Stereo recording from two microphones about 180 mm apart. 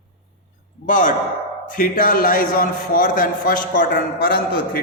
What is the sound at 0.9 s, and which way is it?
A man's voice, 45° left (ahead or behind).